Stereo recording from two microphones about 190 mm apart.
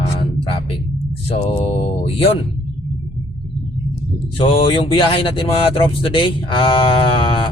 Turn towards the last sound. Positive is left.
turn(degrees=25)  # may be behind; listen again after turning